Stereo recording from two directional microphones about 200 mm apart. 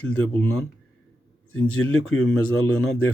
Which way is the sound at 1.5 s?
90° left.